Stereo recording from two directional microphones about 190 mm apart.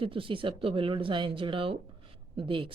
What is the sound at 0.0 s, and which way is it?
Speech, 30° right (ahead or behind).